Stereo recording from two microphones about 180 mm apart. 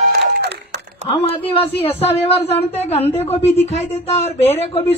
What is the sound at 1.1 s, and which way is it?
A woman's voice, 30° left (ahead or behind).